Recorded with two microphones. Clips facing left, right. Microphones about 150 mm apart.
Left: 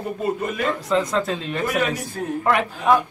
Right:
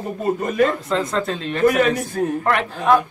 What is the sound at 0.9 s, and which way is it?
Speech, 5° left (ahead or behind).